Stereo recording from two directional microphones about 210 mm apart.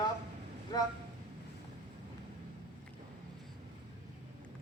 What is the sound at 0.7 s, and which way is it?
Vehicle, 20° left (ahead or behind).